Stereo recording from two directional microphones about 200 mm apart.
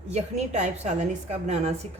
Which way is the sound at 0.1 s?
35° right (ahead or behind).